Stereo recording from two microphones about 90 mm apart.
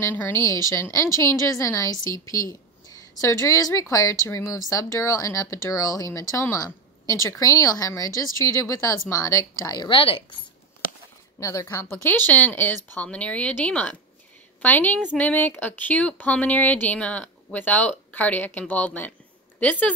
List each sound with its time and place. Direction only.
0.1 s a woman's voice: 30° left (ahead or behind)
9.8 s a woman's voice: 90° left
11.3 s a woman's voice: 35° left (ahead or behind); by 19.9 s 15° left (ahead or behind)